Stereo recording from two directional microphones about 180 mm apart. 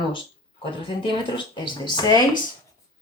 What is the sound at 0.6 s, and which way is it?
Speech, 25° left (ahead or behind).